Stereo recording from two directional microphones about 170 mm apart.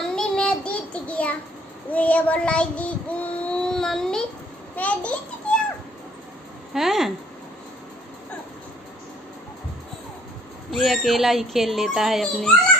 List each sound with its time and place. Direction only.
0.1 s child singing: 5° left (ahead or behind)
4.7 s a child's voice: 10° left (ahead or behind)
6.7 s speech: centre (ahead or behind)
10.7 s speech: centre (ahead or behind)